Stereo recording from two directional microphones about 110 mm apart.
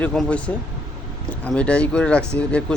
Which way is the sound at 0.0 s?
10° left (ahead or behind).